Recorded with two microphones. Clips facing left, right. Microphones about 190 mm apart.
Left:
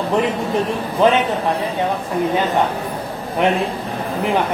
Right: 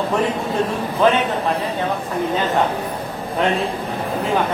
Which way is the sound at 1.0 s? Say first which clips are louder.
Left 2 dB; 20° left (ahead or behind).